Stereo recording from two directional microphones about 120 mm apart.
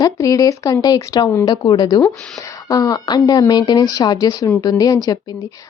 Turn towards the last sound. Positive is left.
turn(degrees=30)  # may be behind; listen again after turning